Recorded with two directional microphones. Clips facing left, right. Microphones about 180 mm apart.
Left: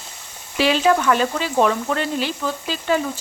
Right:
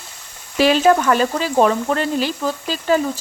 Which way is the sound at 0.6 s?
45° right (ahead or behind).